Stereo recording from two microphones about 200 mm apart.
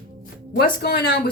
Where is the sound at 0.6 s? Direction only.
45° left (ahead or behind).